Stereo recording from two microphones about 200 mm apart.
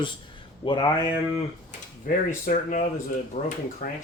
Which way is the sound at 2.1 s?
45° left (ahead or behind).